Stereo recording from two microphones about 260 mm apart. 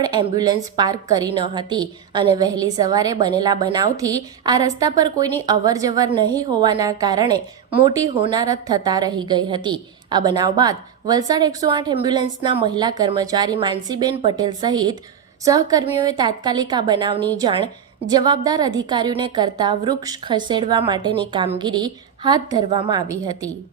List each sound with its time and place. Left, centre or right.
0.2 s a woman's voice: centre